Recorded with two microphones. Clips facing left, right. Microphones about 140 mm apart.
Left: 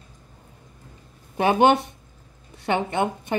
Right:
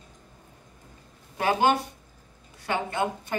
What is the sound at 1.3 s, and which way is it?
Speech, 25° left (ahead or behind).